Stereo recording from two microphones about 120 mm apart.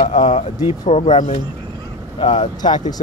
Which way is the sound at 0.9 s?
65° left (ahead or behind).